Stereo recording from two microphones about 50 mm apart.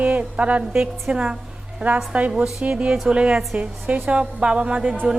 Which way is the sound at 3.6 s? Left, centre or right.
Right.